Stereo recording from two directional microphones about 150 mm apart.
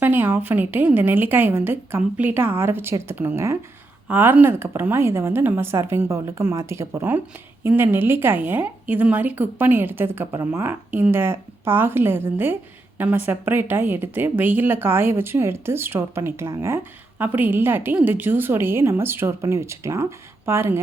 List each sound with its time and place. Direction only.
0.0 s speech: 15° right (ahead or behind)